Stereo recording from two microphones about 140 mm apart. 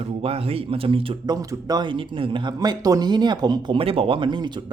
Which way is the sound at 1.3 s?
25° right (ahead or behind).